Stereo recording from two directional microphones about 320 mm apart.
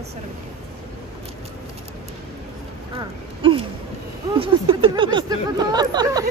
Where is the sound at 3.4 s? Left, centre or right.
Centre.